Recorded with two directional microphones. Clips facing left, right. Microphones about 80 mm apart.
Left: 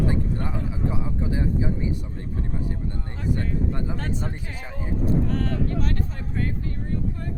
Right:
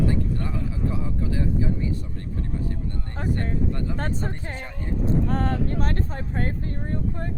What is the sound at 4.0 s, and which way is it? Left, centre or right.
Speech, right.